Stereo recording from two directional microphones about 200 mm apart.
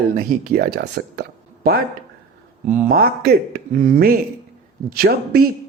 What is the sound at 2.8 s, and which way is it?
Speech, 50° right (ahead or behind).